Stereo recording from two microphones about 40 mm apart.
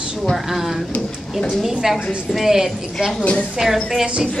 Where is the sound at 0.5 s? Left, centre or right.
Centre.